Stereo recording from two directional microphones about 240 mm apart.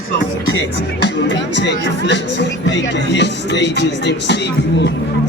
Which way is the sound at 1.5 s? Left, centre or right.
Left.